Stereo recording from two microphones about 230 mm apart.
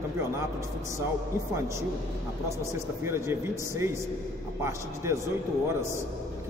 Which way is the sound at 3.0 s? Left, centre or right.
Centre.